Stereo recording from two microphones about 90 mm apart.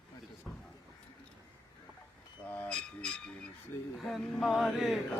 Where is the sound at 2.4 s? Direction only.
15° left (ahead or behind).